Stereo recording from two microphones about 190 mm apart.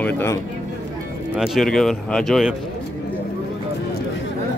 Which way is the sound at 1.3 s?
Centre (ahead or behind).